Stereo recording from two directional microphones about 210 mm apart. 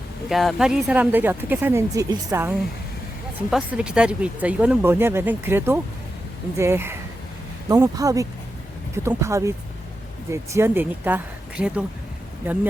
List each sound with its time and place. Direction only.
0.3 s speech: centre (ahead or behind)